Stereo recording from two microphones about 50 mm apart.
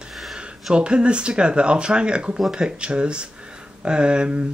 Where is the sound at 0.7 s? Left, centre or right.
Right.